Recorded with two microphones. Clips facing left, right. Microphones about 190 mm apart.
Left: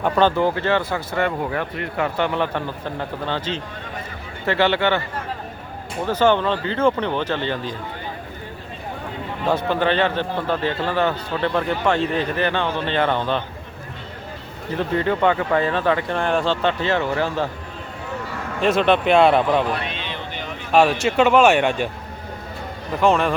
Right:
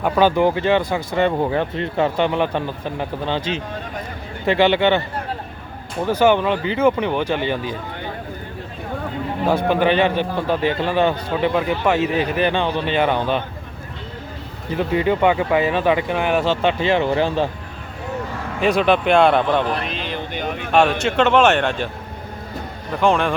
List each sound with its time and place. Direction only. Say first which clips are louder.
0.0 s a man's voice: right 2 dB; 10° right (ahead or behind)
6.1 s a man's voice: right 2 dB; 10° right (ahead or behind)
9.5 s a man's voice: right 2 dB; 10° right (ahead or behind)
14.8 s a man's voice: right 2 dB; 15° right (ahead or behind)
18.6 s speech: right 1 dB; centre (ahead or behind)
20.1 s a sound: right 5 dB; 50° right (ahead or behind)
21.0 s speech: even; 5° left (ahead or behind)
23.0 s speech: even; centre (ahead or behind)